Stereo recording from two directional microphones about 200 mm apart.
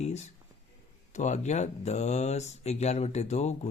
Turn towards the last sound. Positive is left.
turn(degrees=35)  # may be behind; listen again after turning